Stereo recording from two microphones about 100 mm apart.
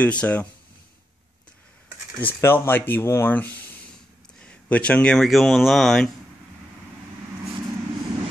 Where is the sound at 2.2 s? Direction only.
20° left (ahead or behind); by 6.1 s 5° left (ahead or behind).